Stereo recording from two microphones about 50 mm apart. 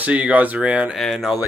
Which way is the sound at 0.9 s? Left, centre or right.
Centre.